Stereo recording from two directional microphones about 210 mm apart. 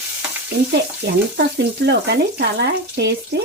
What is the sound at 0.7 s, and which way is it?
Speech, 55° right (ahead or behind).